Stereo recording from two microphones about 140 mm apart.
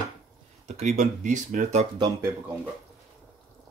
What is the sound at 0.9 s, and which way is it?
Speech, 65° right (ahead or behind).